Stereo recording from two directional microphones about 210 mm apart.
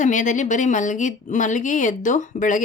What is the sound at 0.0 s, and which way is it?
Speech, 35° left (ahead or behind).